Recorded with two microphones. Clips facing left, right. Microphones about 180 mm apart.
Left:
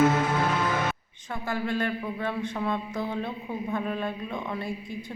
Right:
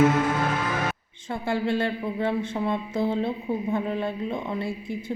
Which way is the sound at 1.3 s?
25° right (ahead or behind).